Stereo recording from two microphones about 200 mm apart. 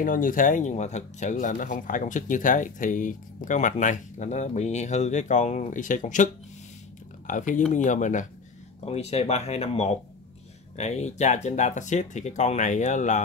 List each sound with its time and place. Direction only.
0.0 s speech: 40° left (ahead or behind)